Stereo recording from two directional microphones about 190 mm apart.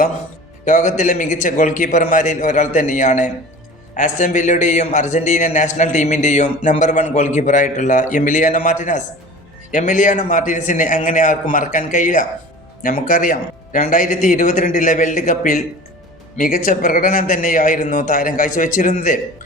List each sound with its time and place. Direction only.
0.6 s a man's voice: 40° left (ahead or behind)